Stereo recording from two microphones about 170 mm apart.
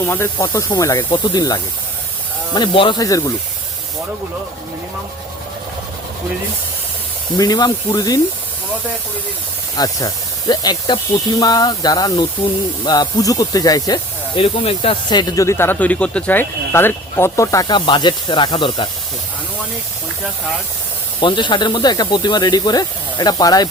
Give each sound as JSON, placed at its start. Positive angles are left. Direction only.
{"t": 0.0, "sound": "speech", "side_deg": 15}
{"t": 7.3, "sound": "speech", "side_deg": 25}
{"t": 9.7, "sound": "speech", "side_deg": 20}
{"t": 21.2, "sound": "speech", "side_deg": 30}